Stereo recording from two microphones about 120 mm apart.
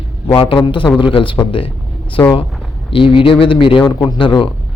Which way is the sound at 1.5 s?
45° left (ahead or behind).